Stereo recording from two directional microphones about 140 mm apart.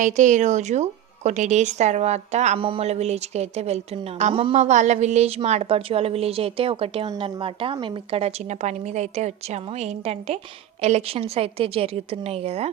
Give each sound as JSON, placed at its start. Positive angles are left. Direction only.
{"t": 0.0, "sound": "speech", "side_deg": -60}
{"t": 2.6, "sound": "a woman's voice", "side_deg": -40}